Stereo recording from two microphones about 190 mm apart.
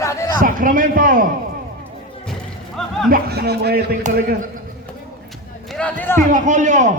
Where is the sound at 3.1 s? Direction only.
55° right (ahead or behind).